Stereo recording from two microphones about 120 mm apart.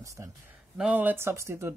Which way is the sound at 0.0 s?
25° right (ahead or behind).